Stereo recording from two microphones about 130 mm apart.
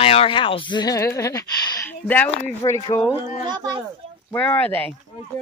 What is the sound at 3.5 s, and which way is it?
Speech, 35° right (ahead or behind).